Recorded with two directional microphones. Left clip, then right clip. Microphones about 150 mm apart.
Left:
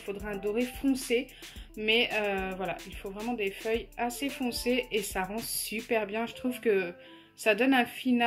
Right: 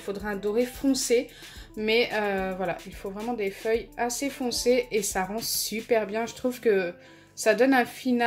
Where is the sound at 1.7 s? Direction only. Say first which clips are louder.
Right 3 dB; 25° right (ahead or behind).